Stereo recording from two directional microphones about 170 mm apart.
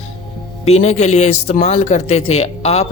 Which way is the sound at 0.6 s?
40° left (ahead or behind).